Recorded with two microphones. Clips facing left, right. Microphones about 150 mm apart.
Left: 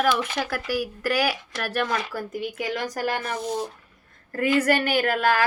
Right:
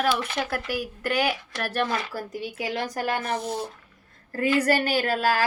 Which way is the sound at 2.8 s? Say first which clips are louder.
Left 2 dB; 40° left (ahead or behind).